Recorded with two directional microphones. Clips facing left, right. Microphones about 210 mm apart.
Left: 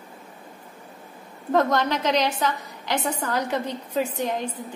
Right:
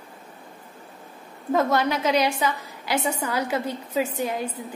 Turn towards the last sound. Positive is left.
turn(degrees=-5)  # may be behind; listen again after turning